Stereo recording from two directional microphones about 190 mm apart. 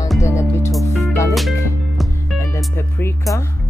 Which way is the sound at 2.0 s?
Centre (ahead or behind).